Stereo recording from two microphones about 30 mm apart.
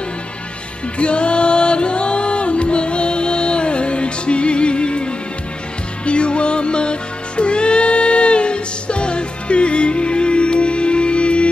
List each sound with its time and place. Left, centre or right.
0.9 s music: left